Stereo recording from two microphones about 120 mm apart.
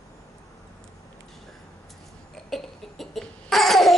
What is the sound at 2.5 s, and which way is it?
Cough, centre (ahead or behind).